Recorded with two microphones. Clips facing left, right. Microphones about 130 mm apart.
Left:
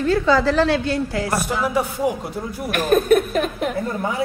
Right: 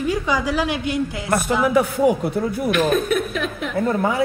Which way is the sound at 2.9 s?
45° left (ahead or behind).